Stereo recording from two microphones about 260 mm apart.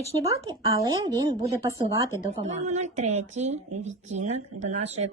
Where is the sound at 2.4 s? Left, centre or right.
Right.